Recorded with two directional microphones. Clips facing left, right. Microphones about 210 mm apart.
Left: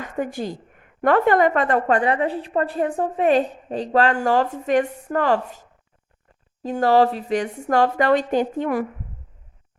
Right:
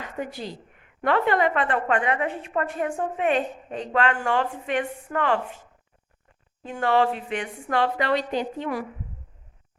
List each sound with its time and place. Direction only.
0.0 s a woman's voice: 50° left (ahead or behind)